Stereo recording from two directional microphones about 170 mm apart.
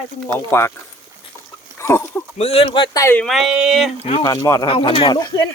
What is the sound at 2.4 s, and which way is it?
Speech, 35° left (ahead or behind).